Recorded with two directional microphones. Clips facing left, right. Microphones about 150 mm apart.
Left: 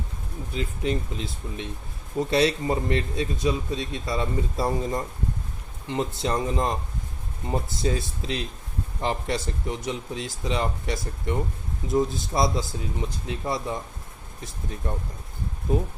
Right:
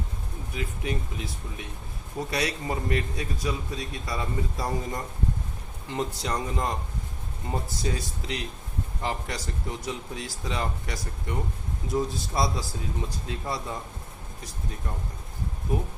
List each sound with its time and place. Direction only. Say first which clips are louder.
0.5 s a man's voice: left 5 dB; 30° left (ahead or behind)